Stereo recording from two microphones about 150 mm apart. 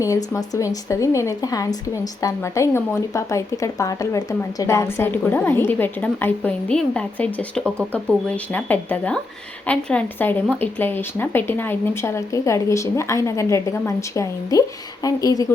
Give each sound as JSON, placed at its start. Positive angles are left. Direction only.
{"t": 0.0, "sound": "speech", "side_deg": 25}